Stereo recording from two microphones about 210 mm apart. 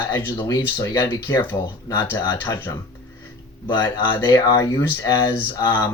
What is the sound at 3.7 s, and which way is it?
Speech, 20° left (ahead or behind).